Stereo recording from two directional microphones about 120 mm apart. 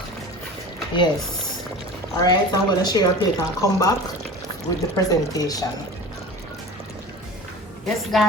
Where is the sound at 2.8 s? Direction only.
35° left (ahead or behind).